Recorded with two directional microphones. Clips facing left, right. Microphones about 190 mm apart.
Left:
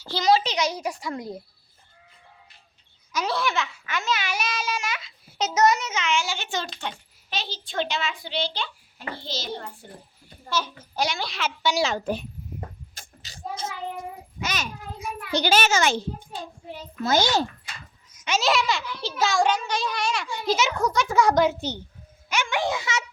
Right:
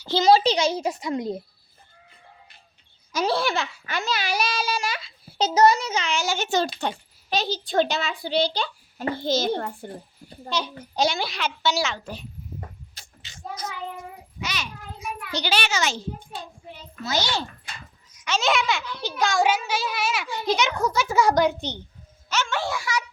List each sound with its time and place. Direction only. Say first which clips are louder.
0.0 s a child's voice: right 4 dB; 25° right (ahead or behind)
3.1 s a child's voice: right 3 dB; 30° right (ahead or behind); by 9.7 s 55° right (ahead or behind)
10.5 s a child's voice: even; 20° right (ahead or behind)
11.3 s a child's voice: even; 5° left (ahead or behind)
11.8 s a child's voice: left 3 dB; 40° left (ahead or behind)
12.9 s a sound: left 3 dB; 50° left (ahead or behind)
13.3 s child singing: left 1 dB; 25° left (ahead or behind)
14.4 s a child's voice: left 2 dB; 45° left (ahead or behind)
17.0 s a child's voice: left 5 dB; 50° left (ahead or behind)
18.3 s a child's voice: even; centre (ahead or behind); by 23.0 s 20° left (ahead or behind)